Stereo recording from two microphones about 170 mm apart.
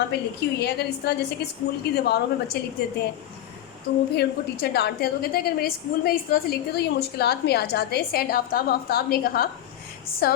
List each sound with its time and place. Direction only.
0.3 s a woman's voice: 75° left (ahead or behind)
4.1 s a woman's voice: 75° left (ahead or behind)